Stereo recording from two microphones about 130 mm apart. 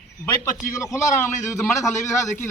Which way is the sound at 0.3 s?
25° left (ahead or behind).